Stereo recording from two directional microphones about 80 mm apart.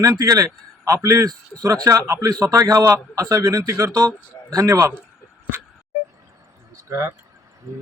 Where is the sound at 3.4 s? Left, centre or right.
Right.